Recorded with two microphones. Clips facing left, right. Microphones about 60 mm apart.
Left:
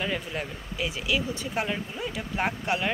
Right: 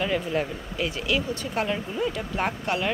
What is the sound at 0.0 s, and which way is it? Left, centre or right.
A woman's voice, centre.